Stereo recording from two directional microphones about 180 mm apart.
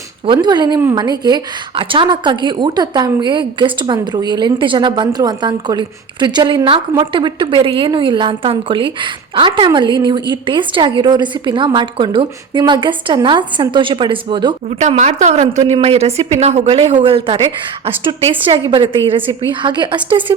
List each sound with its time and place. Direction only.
0.3 s a woman's voice: 25° right (ahead or behind)
14.8 s a woman's voice: 40° right (ahead or behind)